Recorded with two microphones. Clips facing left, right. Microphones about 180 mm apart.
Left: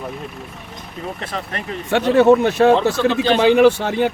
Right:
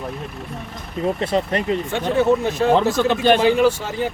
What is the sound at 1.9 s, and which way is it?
Speech, 70° left (ahead or behind).